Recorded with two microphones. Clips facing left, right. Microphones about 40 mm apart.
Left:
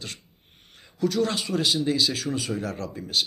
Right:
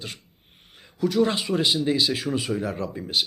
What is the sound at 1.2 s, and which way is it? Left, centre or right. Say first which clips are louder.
A man's voice: right 2 dB; centre.